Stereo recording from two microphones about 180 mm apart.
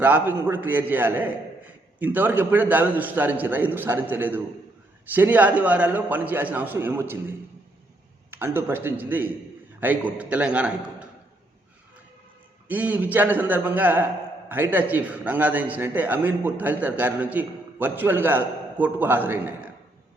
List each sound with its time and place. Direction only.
0.0 s a man's voice: 10° right (ahead or behind)
12.6 s a man's voice: 10° right (ahead or behind)